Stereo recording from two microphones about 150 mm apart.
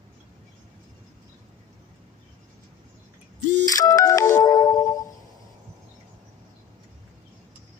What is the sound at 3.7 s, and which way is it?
Music, 25° left (ahead or behind).